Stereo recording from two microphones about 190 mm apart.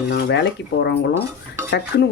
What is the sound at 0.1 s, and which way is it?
Speech, 65° left (ahead or behind).